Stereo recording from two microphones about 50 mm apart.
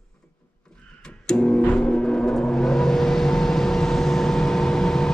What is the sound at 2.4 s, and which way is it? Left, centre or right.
Vehicle, centre.